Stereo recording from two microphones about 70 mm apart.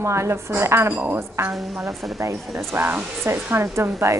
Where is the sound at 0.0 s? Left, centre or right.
Right.